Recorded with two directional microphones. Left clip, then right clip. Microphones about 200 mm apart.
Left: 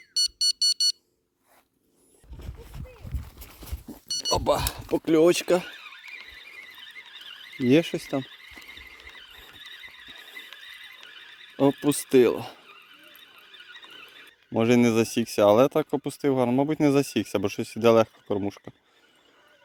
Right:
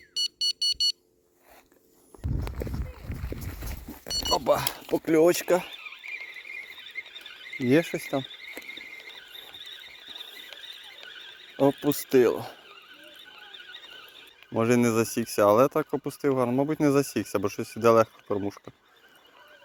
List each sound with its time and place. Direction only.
0.1 s alarm: 25° left (ahead or behind)
4.1 s a sound: 35° left (ahead or behind)
7.6 s speech: 40° left (ahead or behind)
11.8 s speech: 40° left (ahead or behind)
14.5 s speech: 40° left (ahead or behind)